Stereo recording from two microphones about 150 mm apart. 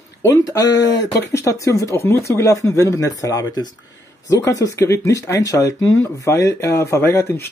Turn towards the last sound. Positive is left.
turn(degrees=15)  # may be behind; listen again after turning